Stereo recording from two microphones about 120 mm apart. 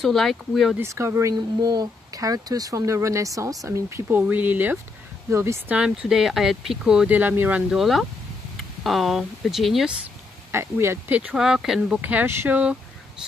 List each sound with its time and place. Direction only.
0.0 s speech: centre (ahead or behind)
0.7 s speech: 20° right (ahead or behind)
1.3 s speech: 35° right (ahead or behind)
5.7 s speech: 10° right (ahead or behind)
7.7 s speech: centre (ahead or behind)
10.5 s speech: 20° right (ahead or behind)